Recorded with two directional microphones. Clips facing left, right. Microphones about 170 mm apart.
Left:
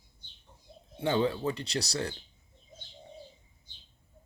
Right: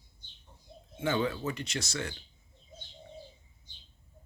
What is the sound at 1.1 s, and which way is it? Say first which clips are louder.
Speech: left 4 dB; 20° left (ahead or behind).